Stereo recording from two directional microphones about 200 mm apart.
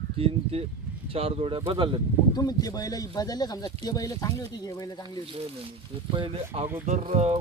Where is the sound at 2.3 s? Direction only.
20° left (ahead or behind).